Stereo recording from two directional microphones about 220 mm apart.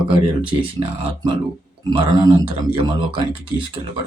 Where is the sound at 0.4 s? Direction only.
25° right (ahead or behind).